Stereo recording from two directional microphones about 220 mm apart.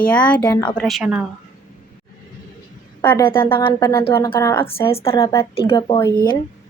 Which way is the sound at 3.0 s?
10° left (ahead or behind).